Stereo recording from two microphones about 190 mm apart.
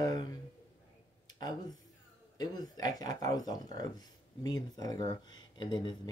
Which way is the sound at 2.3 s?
20° left (ahead or behind).